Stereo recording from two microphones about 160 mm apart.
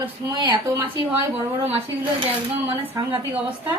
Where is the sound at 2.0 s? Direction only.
35° right (ahead or behind).